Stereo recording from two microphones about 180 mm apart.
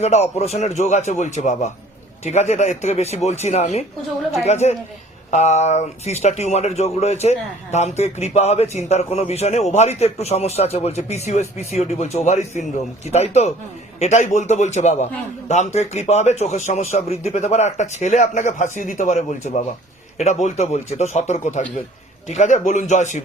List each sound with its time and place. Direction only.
0.0 s speech: 35° left (ahead or behind)